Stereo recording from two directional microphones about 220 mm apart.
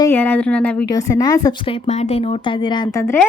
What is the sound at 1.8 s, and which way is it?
Speech, 30° left (ahead or behind).